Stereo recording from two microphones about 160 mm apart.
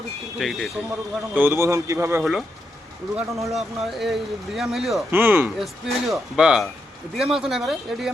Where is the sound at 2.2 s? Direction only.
Centre (ahead or behind).